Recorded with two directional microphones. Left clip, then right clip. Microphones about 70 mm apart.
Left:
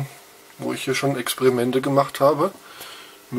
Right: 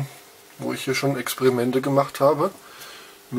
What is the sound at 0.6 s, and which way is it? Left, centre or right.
Speech, centre.